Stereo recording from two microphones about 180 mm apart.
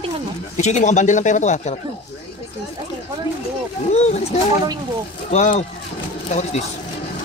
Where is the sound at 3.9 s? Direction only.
35° left (ahead or behind).